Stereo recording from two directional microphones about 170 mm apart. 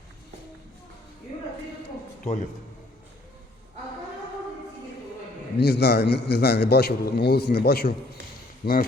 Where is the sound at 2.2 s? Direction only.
45° left (ahead or behind).